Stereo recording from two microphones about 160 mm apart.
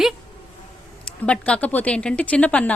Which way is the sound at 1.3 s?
5° left (ahead or behind).